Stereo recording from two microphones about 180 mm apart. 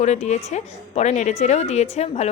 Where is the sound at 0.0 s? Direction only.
40° left (ahead or behind).